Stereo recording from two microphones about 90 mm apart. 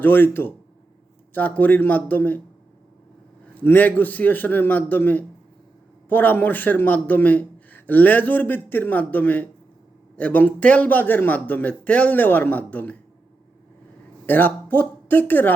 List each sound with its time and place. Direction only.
0.0 s a man's voice: 20° left (ahead or behind)
3.4 s a man's voice: 20° left (ahead or behind)
14.3 s a man's voice: 20° left (ahead or behind)